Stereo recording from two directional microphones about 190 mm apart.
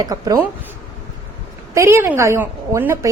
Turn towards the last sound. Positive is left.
turn(degrees=-15)  # may be behind; listen again after turning